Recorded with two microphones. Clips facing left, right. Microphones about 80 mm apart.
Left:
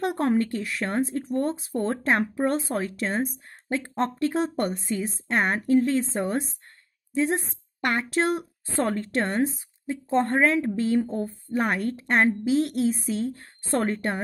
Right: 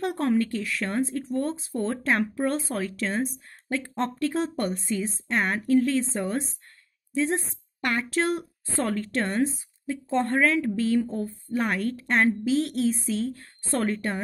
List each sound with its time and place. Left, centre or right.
0.2 s a woman's voice: left